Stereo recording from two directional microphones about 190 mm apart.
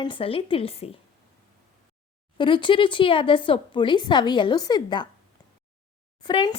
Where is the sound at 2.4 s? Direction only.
25° left (ahead or behind).